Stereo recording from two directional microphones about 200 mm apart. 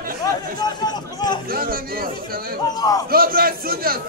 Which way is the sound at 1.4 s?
45° right (ahead or behind).